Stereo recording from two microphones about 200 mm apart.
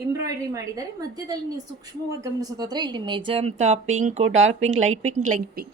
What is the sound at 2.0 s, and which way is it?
Speech, 15° right (ahead or behind).